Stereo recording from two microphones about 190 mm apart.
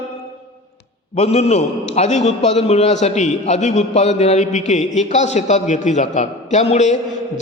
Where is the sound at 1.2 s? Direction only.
35° left (ahead or behind).